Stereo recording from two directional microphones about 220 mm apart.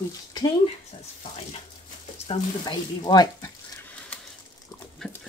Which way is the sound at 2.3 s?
20° left (ahead or behind).